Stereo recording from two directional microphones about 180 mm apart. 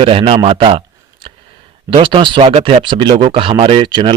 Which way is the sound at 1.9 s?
25° right (ahead or behind).